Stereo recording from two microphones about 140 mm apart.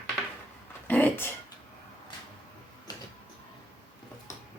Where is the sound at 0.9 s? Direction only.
10° left (ahead or behind).